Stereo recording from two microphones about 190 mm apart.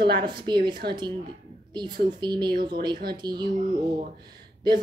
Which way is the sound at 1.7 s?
25° right (ahead or behind).